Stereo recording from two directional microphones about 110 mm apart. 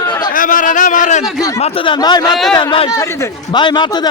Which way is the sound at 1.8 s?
40° left (ahead or behind).